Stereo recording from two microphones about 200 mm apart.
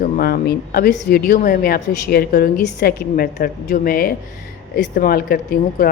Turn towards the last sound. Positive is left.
turn(degrees=45)  # may be behind; listen again after turning